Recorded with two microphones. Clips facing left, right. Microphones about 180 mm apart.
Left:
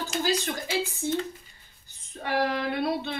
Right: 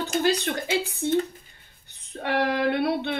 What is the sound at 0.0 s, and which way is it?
Speech, 65° right (ahead or behind).